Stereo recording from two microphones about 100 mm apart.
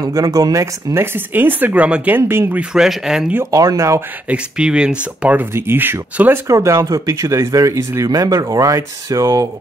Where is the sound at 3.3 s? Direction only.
30° right (ahead or behind).